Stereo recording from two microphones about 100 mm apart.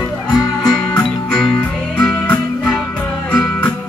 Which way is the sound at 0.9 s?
10° left (ahead or behind).